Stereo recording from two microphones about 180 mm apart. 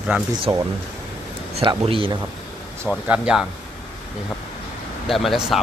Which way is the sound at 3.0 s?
5° right (ahead or behind).